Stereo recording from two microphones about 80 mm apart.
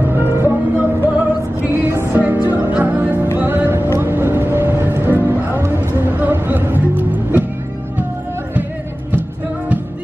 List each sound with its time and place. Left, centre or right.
0.0 s music: right